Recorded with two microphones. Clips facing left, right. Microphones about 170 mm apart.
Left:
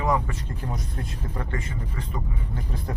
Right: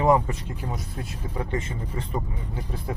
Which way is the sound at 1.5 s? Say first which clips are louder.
Right 3 dB; 25° right (ahead or behind).